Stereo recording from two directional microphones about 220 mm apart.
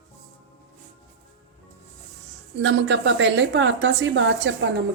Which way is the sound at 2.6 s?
55° right (ahead or behind).